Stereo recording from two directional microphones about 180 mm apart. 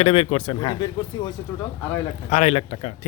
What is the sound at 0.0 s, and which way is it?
Speech, 30° left (ahead or behind).